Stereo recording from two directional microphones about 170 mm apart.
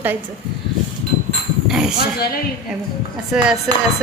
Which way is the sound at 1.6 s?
5° right (ahead or behind).